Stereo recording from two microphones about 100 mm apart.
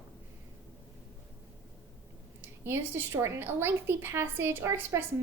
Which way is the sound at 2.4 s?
25° right (ahead or behind).